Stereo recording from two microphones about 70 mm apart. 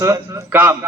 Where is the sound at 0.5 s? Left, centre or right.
Right.